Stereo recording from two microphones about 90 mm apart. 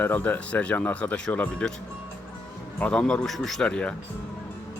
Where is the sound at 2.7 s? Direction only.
15° left (ahead or behind).